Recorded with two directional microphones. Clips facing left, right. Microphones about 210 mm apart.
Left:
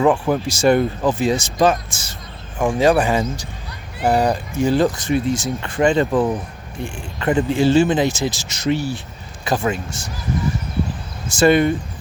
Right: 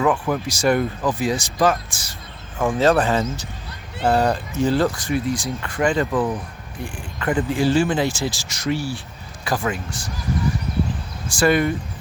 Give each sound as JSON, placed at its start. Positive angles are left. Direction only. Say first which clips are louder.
{"t": 0.0, "sound": "speech", "louder": "left 4 dB", "side_deg": 30}
{"t": 11.3, "sound": "speech", "louder": "left 4 dB", "side_deg": 25}